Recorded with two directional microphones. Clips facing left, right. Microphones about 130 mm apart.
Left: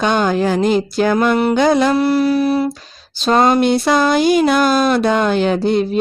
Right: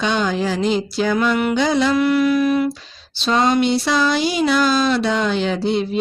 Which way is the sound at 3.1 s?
45° left (ahead or behind).